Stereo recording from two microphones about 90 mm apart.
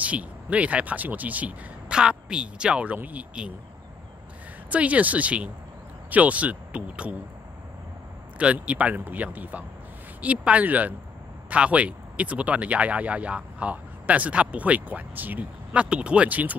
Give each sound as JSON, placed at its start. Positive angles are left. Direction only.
{"t": 0.0, "sound": "speech", "side_deg": -15}
{"t": 4.6, "sound": "speech", "side_deg": -15}
{"t": 8.4, "sound": "speech", "side_deg": -15}